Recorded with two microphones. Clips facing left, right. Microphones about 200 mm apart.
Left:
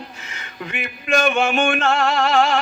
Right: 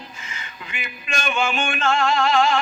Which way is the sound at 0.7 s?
55° left (ahead or behind).